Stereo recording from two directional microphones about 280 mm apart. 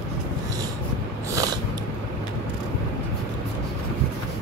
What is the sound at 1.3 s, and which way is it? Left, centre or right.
Mechanisms, centre.